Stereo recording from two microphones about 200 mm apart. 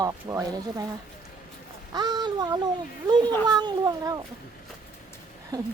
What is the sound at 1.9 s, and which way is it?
Speech, 20° right (ahead or behind).